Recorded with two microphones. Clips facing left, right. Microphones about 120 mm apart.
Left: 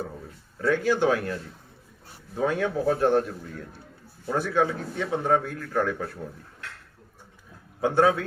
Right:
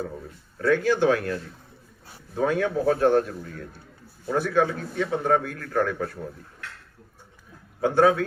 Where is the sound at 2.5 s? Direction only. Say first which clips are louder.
Right 2 dB; 15° left (ahead or behind).